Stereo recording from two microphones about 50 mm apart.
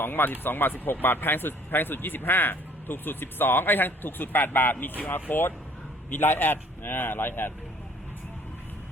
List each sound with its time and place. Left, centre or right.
0.0 s speech: left